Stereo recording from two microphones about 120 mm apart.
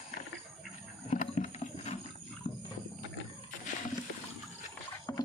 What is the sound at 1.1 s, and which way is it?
Clip-clop, 80° left.